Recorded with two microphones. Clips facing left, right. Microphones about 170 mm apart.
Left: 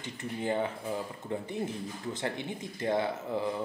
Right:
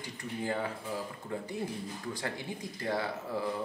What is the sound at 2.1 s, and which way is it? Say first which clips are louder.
Speech: left 3 dB; 20° left (ahead or behind).